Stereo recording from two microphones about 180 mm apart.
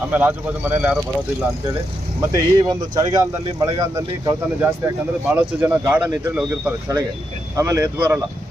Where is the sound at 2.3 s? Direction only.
20° right (ahead or behind).